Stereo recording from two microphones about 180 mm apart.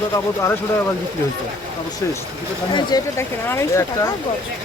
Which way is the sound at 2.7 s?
25° left (ahead or behind).